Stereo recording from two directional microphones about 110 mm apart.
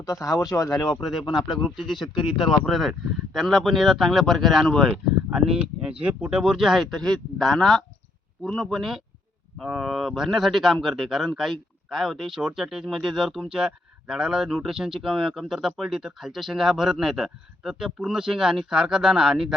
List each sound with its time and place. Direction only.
0.0 s speech: 30° left (ahead or behind)
1.3 s speech: centre (ahead or behind)